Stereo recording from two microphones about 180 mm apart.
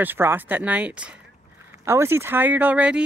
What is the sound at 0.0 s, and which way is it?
Speech, 10° right (ahead or behind).